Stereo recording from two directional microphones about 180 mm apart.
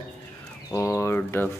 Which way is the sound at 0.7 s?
15° left (ahead or behind).